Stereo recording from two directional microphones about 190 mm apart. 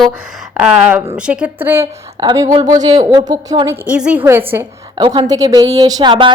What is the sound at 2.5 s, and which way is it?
Speech, 35° right (ahead or behind).